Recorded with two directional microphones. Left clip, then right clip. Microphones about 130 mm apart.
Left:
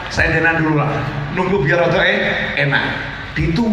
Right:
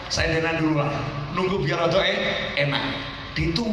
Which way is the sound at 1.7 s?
35° right (ahead or behind).